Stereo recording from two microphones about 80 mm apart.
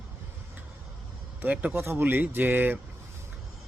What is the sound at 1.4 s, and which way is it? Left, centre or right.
Speech, right.